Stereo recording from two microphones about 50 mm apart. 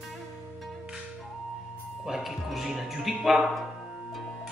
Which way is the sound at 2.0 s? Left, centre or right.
Centre.